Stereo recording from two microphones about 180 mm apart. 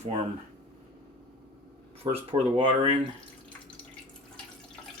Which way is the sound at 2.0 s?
30° right (ahead or behind).